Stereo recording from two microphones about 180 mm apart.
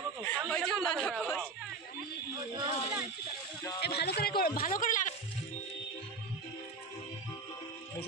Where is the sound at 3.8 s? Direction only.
65° left (ahead or behind).